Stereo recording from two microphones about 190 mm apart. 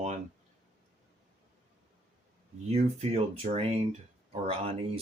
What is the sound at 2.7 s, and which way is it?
Speech, 35° right (ahead or behind).